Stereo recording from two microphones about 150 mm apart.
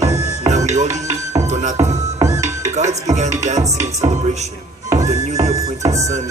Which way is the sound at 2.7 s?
50° right (ahead or behind).